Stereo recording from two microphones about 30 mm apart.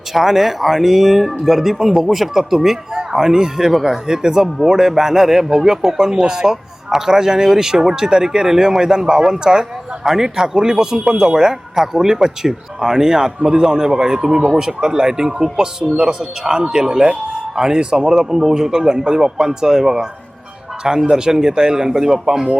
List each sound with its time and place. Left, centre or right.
0.1 s a man's voice: centre; by 18.1 s right
18.1 s a man's voice: centre
21.1 s a man's voice: right